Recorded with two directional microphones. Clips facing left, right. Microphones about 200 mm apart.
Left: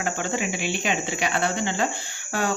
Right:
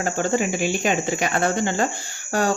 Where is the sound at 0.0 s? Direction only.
40° right (ahead or behind).